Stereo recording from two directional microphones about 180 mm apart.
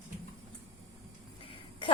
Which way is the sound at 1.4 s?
30° left (ahead or behind).